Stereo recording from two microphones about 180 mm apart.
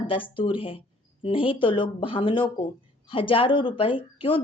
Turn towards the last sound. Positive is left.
turn(degrees=30)  # may be behind; listen again after turning